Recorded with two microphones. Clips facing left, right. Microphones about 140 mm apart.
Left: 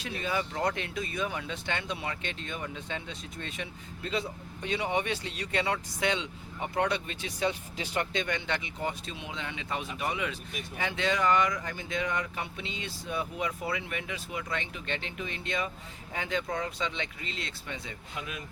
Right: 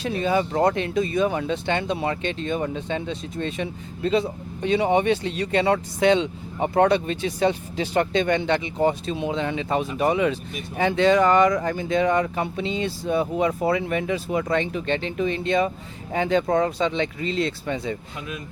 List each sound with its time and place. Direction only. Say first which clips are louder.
0.0 s speech: right 10 dB; 30° right (ahead or behind)